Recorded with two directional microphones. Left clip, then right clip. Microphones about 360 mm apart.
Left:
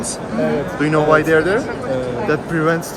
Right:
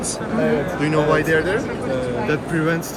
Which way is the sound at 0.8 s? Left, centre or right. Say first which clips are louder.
Left 7 dB; left.